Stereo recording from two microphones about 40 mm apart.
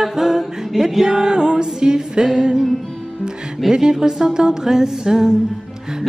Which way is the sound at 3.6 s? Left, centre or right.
Centre.